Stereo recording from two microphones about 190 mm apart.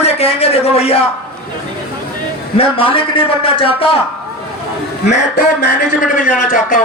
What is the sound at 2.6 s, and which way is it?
A man's voice, 30° left (ahead or behind).